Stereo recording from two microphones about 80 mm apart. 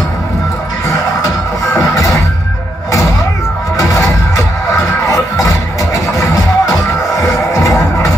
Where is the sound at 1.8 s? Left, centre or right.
Left.